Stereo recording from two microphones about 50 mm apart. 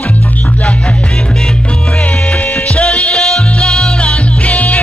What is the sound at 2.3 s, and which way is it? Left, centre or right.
Music, left.